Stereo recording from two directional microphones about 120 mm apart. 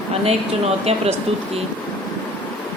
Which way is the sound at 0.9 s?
60° right (ahead or behind).